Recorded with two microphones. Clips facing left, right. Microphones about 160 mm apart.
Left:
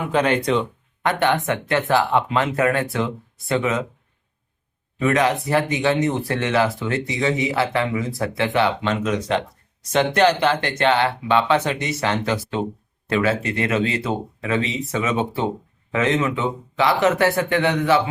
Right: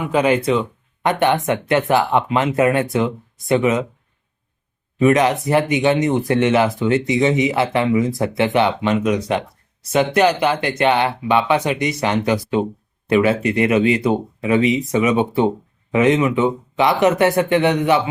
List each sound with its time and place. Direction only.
0.1 s speech: 5° right (ahead or behind)
1.0 s speech: 20° right (ahead or behind)
4.9 s speech: 20° right (ahead or behind)